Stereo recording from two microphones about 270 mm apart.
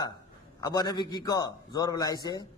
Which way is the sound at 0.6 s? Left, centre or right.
Centre.